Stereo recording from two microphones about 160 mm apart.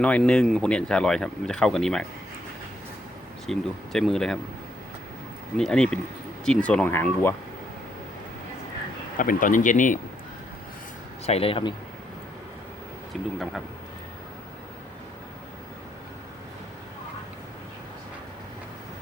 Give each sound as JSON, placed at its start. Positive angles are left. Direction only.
{"t": 0.0, "sound": "speech", "side_deg": 5}
{"t": 3.4, "sound": "speech", "side_deg": 0}
{"t": 5.5, "sound": "speech", "side_deg": 5}
{"t": 9.1, "sound": "speech", "side_deg": 60}
{"t": 11.3, "sound": "speech", "side_deg": 35}
{"t": 13.1, "sound": "speech", "side_deg": 0}